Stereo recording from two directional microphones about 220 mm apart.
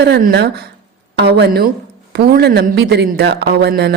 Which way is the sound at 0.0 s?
45° right (ahead or behind).